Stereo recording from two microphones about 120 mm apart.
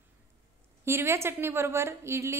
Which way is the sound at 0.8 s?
20° right (ahead or behind).